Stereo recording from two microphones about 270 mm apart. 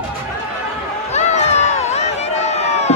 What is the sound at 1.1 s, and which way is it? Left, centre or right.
Run, left.